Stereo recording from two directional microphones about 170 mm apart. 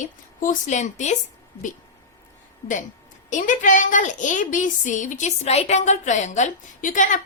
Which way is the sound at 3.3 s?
50° left (ahead or behind).